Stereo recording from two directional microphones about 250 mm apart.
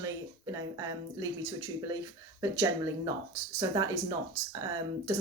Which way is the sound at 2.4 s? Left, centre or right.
Centre.